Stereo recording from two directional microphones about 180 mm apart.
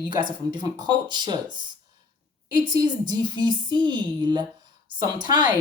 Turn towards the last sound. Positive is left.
turn(degrees=-25)  # may be behind; listen again after turning